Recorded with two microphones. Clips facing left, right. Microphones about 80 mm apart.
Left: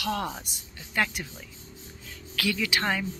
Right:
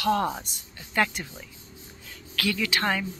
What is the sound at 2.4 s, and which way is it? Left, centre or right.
Speech, centre.